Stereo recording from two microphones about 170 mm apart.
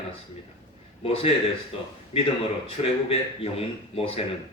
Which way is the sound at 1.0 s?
35° left (ahead or behind).